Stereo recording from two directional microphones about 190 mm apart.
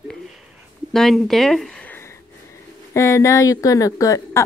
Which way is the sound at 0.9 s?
Centre (ahead or behind).